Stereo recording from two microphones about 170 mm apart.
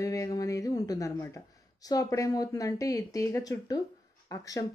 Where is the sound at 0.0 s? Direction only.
20° left (ahead or behind).